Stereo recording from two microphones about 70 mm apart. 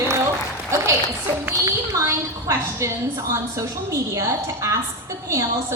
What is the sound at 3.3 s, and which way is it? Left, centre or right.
A woman's voice, right.